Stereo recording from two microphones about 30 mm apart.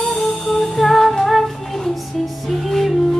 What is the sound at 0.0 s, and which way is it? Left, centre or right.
Music, centre.